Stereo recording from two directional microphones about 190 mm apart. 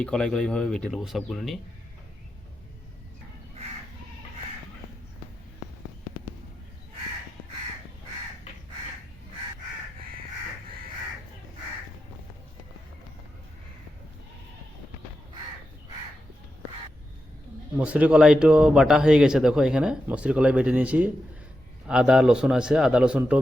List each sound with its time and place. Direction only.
0.0 s speech: 5° left (ahead or behind)
17.7 s speech: 5° right (ahead or behind)